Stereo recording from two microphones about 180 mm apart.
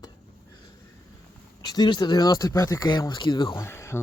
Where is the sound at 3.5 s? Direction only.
15° left (ahead or behind).